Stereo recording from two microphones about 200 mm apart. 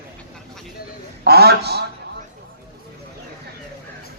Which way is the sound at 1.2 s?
55° right (ahead or behind).